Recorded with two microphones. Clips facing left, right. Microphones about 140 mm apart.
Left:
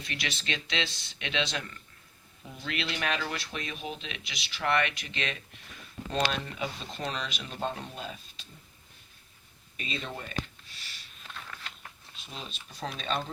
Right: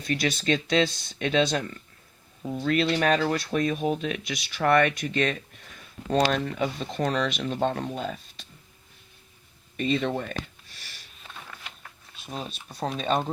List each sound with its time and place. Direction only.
0.0 s speech: 40° right (ahead or behind)
9.8 s speech: 60° right (ahead or behind)
11.2 s a sound: 10° right (ahead or behind)
12.2 s speech: 50° right (ahead or behind)